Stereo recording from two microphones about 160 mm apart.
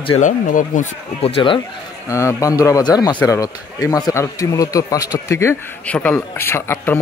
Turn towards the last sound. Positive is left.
turn(degrees=15)  # may be behind; listen again after turning